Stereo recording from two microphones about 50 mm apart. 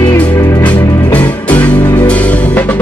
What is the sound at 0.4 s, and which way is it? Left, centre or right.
Music, left.